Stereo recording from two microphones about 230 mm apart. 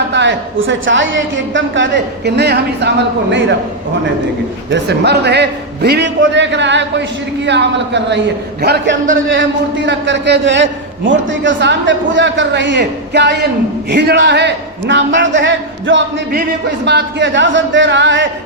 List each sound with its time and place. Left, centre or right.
0.1 s a man's voice: right
4.7 s a man's voice: right